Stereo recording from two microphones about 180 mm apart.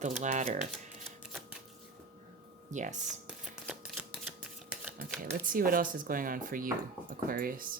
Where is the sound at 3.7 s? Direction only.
5° right (ahead or behind).